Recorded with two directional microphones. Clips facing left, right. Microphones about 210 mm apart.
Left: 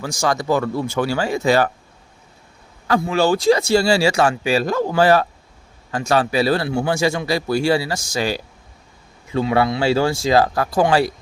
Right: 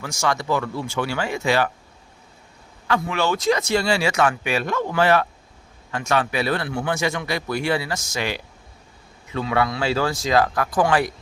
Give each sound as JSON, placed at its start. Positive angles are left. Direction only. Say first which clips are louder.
{"t": 0.0, "sound": "speech", "louder": "left 3 dB", "side_deg": 35}
{"t": 2.8, "sound": "speech", "louder": "left 5 dB", "side_deg": 35}